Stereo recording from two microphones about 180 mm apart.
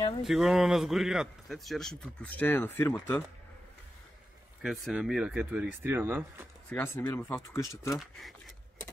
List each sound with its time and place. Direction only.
0.2 s a man's voice: centre (ahead or behind)
4.6 s speech: centre (ahead or behind)
6.7 s speech: 10° left (ahead or behind)
8.0 s a man's voice: centre (ahead or behind)